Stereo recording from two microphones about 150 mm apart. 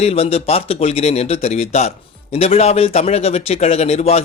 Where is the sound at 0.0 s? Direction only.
40° left (ahead or behind).